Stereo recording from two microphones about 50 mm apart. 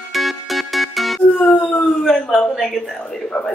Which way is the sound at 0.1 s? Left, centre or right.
Centre.